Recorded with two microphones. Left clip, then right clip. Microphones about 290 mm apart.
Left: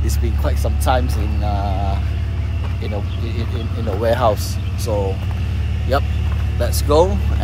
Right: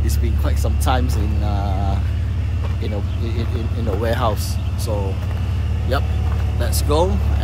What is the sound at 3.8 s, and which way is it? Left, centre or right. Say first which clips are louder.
Speech: left 5 dB; centre.